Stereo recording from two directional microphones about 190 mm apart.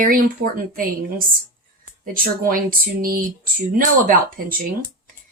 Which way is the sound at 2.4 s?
50° right (ahead or behind).